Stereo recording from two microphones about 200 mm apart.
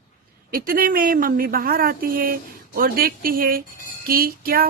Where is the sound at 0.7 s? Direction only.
45° right (ahead or behind).